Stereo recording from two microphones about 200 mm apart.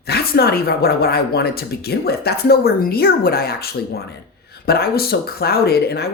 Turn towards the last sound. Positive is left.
turn(degrees=55)  # may be behind; listen again after turning